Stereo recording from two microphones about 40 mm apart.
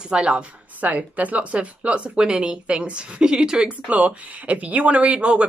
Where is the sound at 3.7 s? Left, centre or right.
Right.